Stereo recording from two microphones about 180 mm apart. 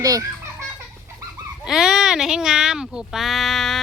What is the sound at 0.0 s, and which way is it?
Speech, 20° right (ahead or behind).